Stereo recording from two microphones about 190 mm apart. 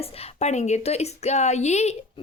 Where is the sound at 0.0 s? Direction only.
30° left (ahead or behind).